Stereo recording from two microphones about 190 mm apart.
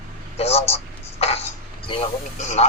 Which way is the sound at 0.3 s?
35° left (ahead or behind).